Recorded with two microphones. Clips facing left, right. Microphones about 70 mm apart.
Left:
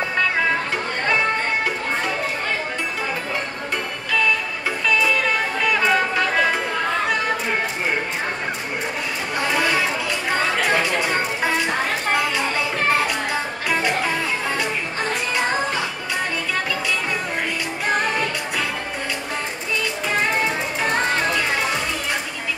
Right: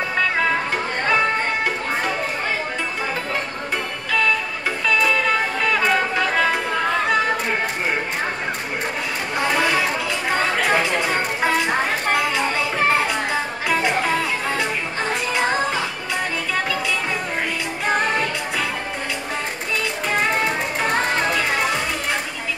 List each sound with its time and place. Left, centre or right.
5.7 s music: centre
9.4 s chatter: centre
10.6 s chatter: centre
12.1 s a sound: centre
14.6 s music: centre
17.8 s music: centre
20.1 s music: centre